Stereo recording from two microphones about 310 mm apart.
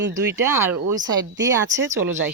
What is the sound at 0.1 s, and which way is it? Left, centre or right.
Speech, centre.